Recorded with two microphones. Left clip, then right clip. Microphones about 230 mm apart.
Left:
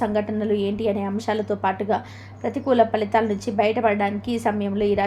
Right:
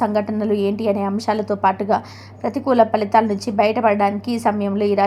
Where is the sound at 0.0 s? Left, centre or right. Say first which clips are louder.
Right 4 dB; centre.